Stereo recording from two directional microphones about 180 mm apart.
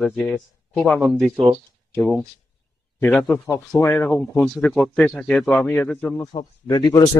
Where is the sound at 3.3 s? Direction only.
15° left (ahead or behind).